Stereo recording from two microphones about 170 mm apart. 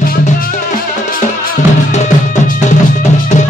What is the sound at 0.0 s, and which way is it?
Music, 55° left (ahead or behind).